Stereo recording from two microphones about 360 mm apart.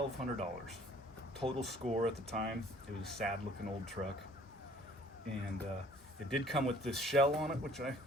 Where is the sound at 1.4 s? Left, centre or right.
Centre.